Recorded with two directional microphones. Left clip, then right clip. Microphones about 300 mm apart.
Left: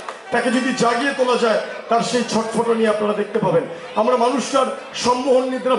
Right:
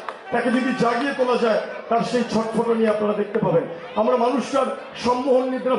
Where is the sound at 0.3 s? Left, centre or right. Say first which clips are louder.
Left 3 dB; centre.